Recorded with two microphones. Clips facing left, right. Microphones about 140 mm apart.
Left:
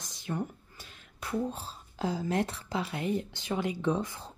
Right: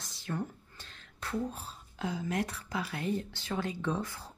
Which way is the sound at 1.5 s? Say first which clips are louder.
Left 4 dB; 30° left (ahead or behind).